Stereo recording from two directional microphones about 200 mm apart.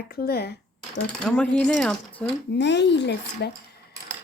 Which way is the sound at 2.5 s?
60° left (ahead or behind).